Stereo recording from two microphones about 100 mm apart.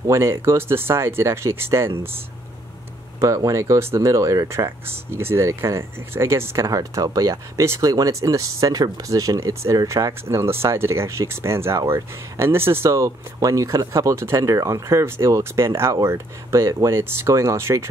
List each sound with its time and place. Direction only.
0.0 s speech: 25° right (ahead or behind)